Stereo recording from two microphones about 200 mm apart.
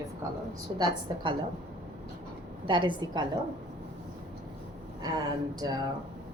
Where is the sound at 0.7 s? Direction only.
25° right (ahead or behind).